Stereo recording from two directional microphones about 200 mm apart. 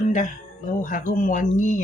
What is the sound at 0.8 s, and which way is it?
Speech, 40° left (ahead or behind).